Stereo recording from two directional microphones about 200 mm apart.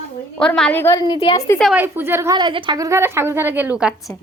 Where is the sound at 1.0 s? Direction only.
25° left (ahead or behind).